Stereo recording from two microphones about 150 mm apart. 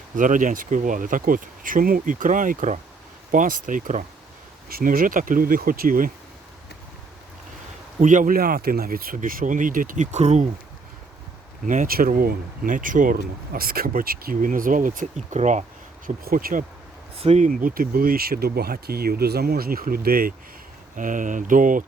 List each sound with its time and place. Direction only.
0.2 s speech: 60° right (ahead or behind)
4.7 s speech: 70° right (ahead or behind)
8.0 s speech: 60° right (ahead or behind)
11.6 s speech: 60° right (ahead or behind)
16.0 s speech: 75° right (ahead or behind)
17.2 s speech: 45° right (ahead or behind); by 20.3 s 80° right
20.9 s speech: 60° right (ahead or behind)